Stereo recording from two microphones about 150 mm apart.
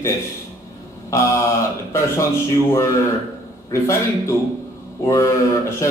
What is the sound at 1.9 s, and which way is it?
Speech, 20° left (ahead or behind).